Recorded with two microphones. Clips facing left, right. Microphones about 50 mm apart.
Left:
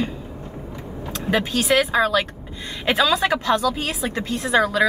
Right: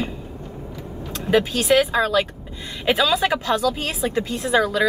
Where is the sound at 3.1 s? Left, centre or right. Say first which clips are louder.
Left 1 dB; centre.